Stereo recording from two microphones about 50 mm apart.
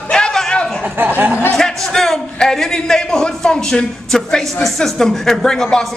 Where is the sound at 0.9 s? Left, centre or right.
Right.